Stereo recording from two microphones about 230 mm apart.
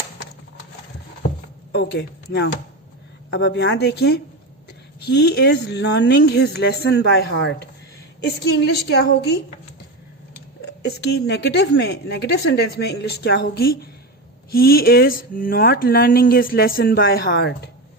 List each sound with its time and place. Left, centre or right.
1.7 s a woman's voice: left
10.9 s a woman's voice: left